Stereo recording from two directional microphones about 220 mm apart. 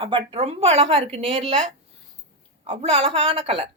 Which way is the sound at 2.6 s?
25° right (ahead or behind).